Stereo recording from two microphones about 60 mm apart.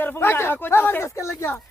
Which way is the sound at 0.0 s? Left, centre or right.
Left.